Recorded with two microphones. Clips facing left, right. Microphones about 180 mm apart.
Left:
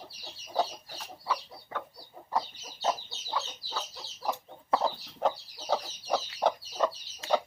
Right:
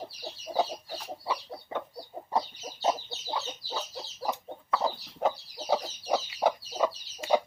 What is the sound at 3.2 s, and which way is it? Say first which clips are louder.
Chicken: right 1 dB; 20° right (ahead or behind).